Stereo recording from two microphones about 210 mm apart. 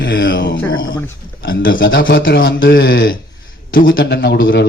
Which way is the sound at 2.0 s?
45° left (ahead or behind).